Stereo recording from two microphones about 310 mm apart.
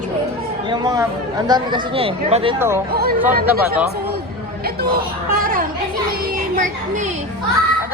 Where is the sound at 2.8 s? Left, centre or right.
Right.